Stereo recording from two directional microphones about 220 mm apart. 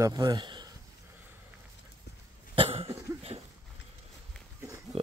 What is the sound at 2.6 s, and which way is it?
Cough, 25° right (ahead or behind).